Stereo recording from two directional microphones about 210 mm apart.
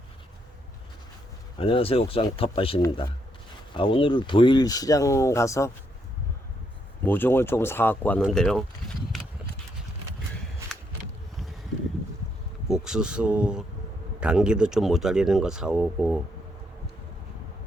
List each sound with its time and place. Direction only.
1.5 s speech: 25° left (ahead or behind)
7.0 s speech: 10° left (ahead or behind)
8.2 s a sound: 5° left (ahead or behind)
12.6 s speech: 5° right (ahead or behind)